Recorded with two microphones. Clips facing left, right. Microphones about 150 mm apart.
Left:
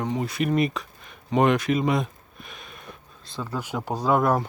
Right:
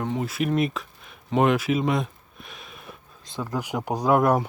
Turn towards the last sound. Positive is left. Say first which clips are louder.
# right 2 dB
turn(degrees=-15)  # may be behind; listen again after turning